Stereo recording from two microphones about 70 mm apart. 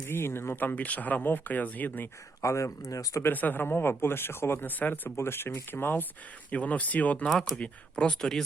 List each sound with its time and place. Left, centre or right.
0.0 s speech: left
2.4 s speech: left
3.2 s speech: left
7.3 s speech: centre
7.6 s speech: centre